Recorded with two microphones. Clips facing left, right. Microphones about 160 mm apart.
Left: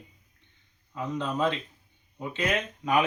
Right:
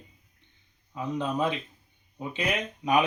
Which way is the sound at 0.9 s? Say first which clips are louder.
Right 1 dB; 15° right (ahead or behind).